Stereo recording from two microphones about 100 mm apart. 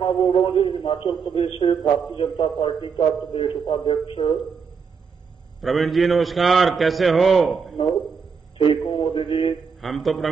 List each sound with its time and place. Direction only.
0.0 s a man's voice: 50° left (ahead or behind)
1.6 s a man's voice: 45° left (ahead or behind)
5.6 s a man's voice: centre (ahead or behind)
8.5 s a man's voice: 50° left (ahead or behind)
9.8 s a man's voice: centre (ahead or behind)